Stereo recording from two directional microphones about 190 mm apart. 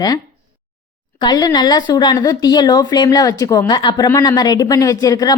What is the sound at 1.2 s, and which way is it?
A woman's voice, 20° left (ahead or behind).